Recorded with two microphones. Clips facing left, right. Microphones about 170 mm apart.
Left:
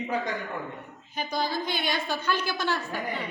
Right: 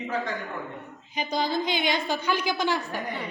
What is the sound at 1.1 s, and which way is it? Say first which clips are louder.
A woman's voice: right 3 dB; 20° right (ahead or behind).